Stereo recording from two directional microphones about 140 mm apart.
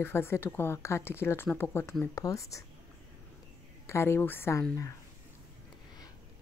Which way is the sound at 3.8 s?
20° left (ahead or behind).